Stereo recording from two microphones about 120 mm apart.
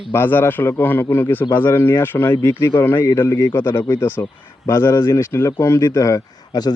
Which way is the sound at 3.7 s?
35° left (ahead or behind).